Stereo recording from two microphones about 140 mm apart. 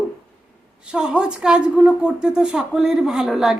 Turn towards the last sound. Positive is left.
turn(degrees=0)  # may be behind; listen again after turning